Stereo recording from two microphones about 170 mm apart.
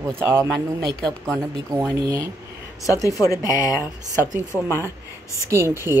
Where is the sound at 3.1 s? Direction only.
20° left (ahead or behind).